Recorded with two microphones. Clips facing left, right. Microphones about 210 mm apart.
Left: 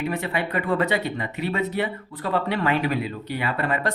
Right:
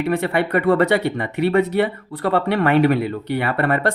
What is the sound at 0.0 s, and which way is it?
Speech, 65° right (ahead or behind).